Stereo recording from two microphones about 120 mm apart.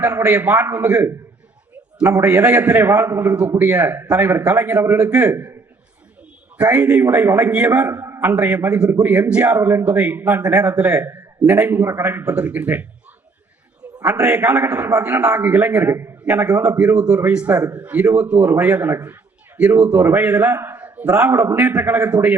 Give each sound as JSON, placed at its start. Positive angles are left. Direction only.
{"t": 0.0, "sound": "a man's voice", "side_deg": -20}
{"t": 2.2, "sound": "a man's voice", "side_deg": -10}
{"t": 6.6, "sound": "a man's voice", "side_deg": -10}
{"t": 11.8, "sound": "a man's voice", "side_deg": -20}
{"t": 14.0, "sound": "a man's voice", "side_deg": -10}
{"t": 16.6, "sound": "a man's voice", "side_deg": -10}